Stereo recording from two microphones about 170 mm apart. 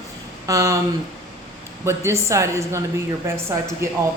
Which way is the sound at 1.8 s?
15° right (ahead or behind).